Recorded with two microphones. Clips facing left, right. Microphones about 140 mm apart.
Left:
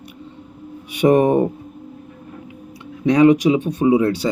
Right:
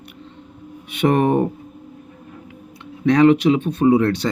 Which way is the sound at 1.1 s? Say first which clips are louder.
Left 3 dB; 15° left (ahead or behind).